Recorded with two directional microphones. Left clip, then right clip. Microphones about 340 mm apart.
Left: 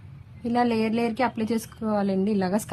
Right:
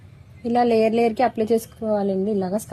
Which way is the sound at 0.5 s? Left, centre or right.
Centre.